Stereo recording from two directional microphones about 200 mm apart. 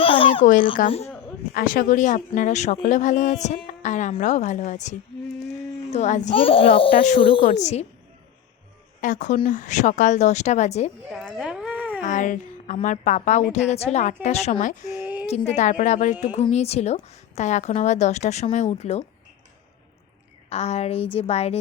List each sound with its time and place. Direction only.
0.0 s a sound: 25° left (ahead or behind)
0.9 s speech: 30° left (ahead or behind)
1.5 s speech: 45° left (ahead or behind); by 6.7 s 25° left (ahead or behind)
6.9 s speech: 40° left (ahead or behind)
9.0 s speech: 40° left (ahead or behind)
11.1 s a sound: centre (ahead or behind)
12.0 s speech: 40° left (ahead or behind)
15.0 s a sound: 10° right (ahead or behind)
15.3 s speech: 35° left (ahead or behind)
20.5 s speech: 30° left (ahead or behind)